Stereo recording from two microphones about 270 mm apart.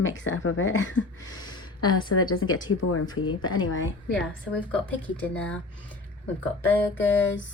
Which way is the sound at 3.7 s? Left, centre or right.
Left.